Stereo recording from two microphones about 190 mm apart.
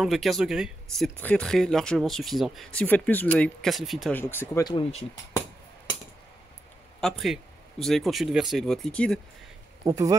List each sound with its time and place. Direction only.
0.0 s speech: centre (ahead or behind)
4.1 s speech: 10° left (ahead or behind)
7.0 s speech: centre (ahead or behind)
9.8 s speech: 20° right (ahead or behind)